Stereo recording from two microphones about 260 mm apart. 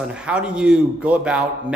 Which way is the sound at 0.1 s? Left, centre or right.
Centre.